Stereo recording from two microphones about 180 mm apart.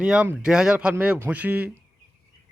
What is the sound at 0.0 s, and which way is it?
Speech, 5° right (ahead or behind).